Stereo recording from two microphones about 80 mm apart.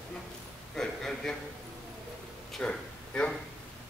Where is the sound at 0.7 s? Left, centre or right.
Centre.